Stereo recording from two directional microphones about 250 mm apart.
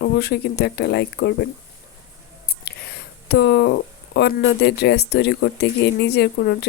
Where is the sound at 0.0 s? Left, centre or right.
Left.